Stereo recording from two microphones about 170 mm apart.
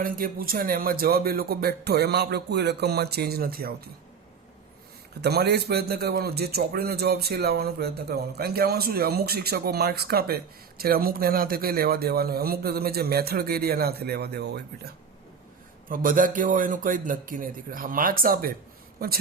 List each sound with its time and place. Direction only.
0.0 s a man's voice: 55° right (ahead or behind)
5.2 s a man's voice: 70° right (ahead or behind)
15.9 s a man's voice: 55° right (ahead or behind)